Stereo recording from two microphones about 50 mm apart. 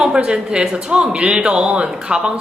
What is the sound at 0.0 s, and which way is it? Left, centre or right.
Speech, centre.